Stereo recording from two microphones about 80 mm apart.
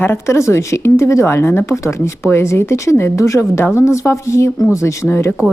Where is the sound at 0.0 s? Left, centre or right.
Left.